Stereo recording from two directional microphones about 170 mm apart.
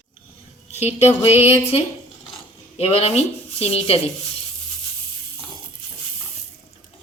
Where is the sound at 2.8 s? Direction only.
35° left (ahead or behind).